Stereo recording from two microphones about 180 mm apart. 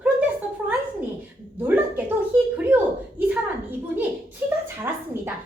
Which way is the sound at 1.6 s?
10° right (ahead or behind).